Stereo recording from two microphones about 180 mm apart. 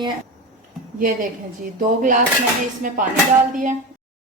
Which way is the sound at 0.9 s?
50° right (ahead or behind).